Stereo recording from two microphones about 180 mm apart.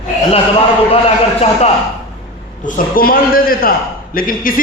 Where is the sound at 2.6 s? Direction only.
50° left (ahead or behind).